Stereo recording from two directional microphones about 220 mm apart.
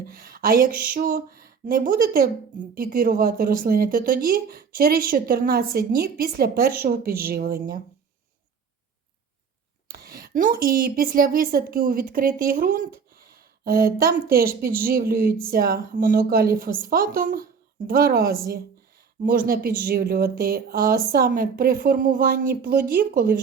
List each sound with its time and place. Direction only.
0.1 s a sound: 40° right (ahead or behind)
0.9 s speech: 40° right (ahead or behind)
9.9 s speech: 45° right (ahead or behind)